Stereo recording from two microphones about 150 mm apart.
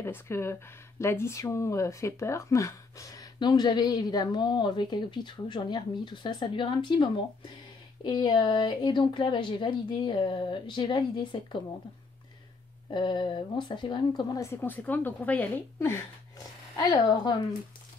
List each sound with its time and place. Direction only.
0.0 s a woman's voice: 15° left (ahead or behind)
12.9 s speech: 30° left (ahead or behind); by 16.0 s 15° left (ahead or behind)
16.7 s speech: 25° left (ahead or behind)